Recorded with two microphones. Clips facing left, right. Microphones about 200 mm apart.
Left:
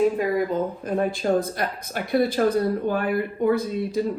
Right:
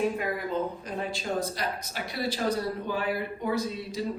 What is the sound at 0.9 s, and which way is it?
A woman's voice, 55° left (ahead or behind).